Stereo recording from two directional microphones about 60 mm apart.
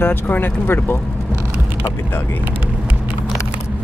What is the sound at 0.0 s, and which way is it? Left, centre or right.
Speech, left.